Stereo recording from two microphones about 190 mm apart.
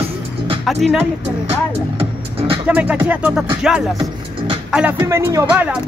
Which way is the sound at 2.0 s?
30° right (ahead or behind).